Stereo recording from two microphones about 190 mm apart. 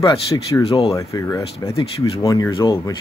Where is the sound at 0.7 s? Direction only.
30° left (ahead or behind).